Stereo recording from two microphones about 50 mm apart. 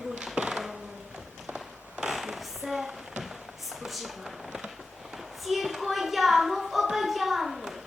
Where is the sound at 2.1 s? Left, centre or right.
Centre.